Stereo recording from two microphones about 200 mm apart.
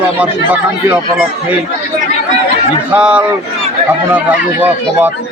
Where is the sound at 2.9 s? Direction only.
10° right (ahead or behind).